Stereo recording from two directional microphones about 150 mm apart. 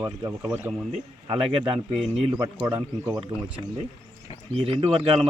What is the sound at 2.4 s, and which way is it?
Speech, 25° right (ahead or behind).